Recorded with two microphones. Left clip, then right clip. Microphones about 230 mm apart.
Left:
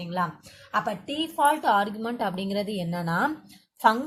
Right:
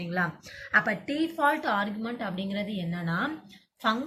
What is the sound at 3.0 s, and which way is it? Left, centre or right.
Speech, left.